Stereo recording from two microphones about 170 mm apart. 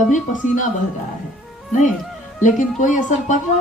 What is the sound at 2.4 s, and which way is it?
Speech, 45° left (ahead or behind).